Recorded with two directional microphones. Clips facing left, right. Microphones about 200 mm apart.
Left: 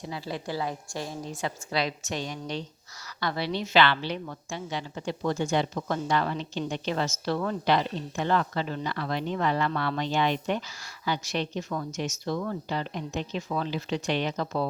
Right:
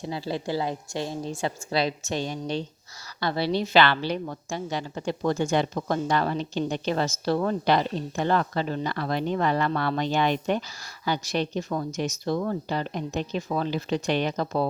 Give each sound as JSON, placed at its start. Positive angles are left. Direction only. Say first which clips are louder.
{"t": 0.0, "sound": "a woman's voice", "louder": "right 4 dB", "side_deg": -30}